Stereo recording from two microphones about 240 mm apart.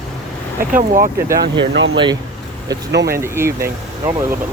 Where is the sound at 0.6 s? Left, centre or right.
Right.